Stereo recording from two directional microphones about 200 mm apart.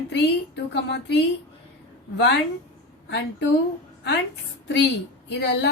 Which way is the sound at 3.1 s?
60° left (ahead or behind).